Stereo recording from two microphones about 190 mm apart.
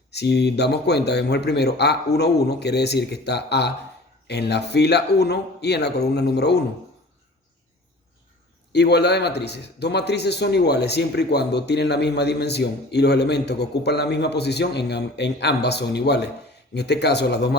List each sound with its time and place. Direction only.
0.1 s speech: 60° left (ahead or behind)
8.7 s speech: 60° left (ahead or behind)